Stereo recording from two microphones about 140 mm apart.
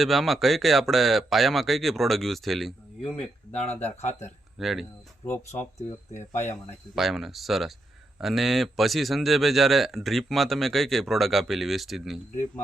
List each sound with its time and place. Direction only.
0.0 s a man's voice: centre (ahead or behind)
3.5 s speech: 50° left (ahead or behind)
4.5 s a man's voice: centre (ahead or behind)
5.2 s speech: 20° left (ahead or behind)
6.1 s speech: 55° left (ahead or behind)
6.9 s a man's voice: centre (ahead or behind)